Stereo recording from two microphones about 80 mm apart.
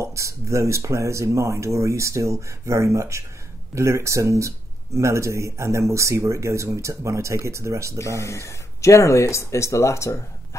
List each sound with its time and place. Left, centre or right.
0.0 s speech: right
8.0 s speech: left